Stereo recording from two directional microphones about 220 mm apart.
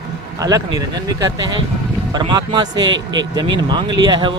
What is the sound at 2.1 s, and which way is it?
Speech, 20° right (ahead or behind).